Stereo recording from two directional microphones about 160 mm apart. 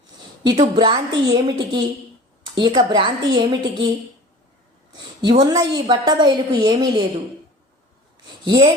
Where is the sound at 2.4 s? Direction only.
30° right (ahead or behind).